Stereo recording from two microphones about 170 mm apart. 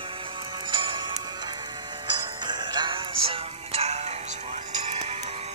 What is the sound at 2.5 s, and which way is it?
Music, 25° right (ahead or behind).